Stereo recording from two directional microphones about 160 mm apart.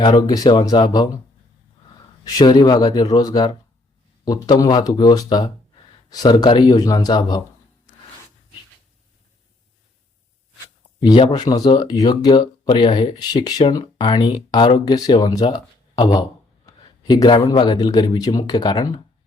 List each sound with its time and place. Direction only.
0.0 s speech: 25° left (ahead or behind)
2.2 s speech: 25° left (ahead or behind)
11.0 s speech: 30° left (ahead or behind)